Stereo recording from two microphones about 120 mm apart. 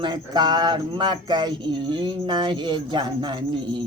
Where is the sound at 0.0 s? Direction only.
35° right (ahead or behind).